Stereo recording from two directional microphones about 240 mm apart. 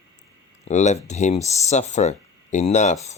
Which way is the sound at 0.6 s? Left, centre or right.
Left.